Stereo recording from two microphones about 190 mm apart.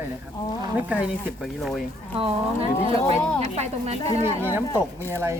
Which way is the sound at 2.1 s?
30° right (ahead or behind).